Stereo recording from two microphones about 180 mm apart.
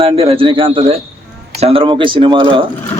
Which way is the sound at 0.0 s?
30° right (ahead or behind).